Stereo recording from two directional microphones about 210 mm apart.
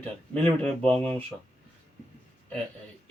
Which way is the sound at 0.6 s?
5° left (ahead or behind).